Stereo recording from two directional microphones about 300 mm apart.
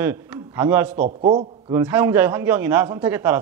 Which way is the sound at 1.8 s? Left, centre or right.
Centre.